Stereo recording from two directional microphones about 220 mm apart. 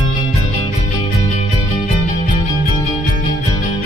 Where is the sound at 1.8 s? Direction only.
35° left (ahead or behind).